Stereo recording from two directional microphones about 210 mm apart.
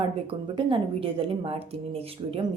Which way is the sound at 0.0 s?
25° right (ahead or behind).